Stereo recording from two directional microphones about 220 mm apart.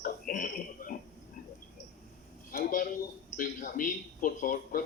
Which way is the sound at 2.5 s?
40° left (ahead or behind).